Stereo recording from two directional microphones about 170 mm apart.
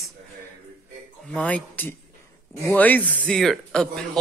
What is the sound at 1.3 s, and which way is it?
Speech, 10° left (ahead or behind).